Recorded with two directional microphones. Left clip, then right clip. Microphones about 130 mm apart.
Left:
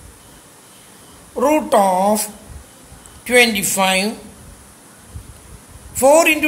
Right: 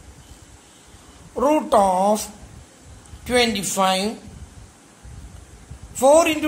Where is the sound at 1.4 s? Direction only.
25° right (ahead or behind).